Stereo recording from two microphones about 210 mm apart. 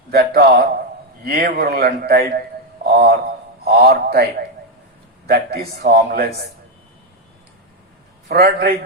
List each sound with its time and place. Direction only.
0.1 s a man's voice: 50° right (ahead or behind)
2.9 s a sound: 45° right (ahead or behind)
3.6 s a man's voice: 50° right (ahead or behind)
8.3 s a man's voice: 45° right (ahead or behind)